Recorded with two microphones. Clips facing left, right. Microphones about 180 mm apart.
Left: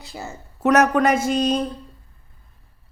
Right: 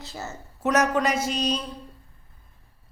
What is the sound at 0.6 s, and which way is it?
A man's voice, 60° left (ahead or behind).